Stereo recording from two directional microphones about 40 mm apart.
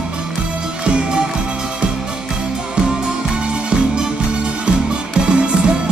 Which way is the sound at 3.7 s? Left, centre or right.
Right.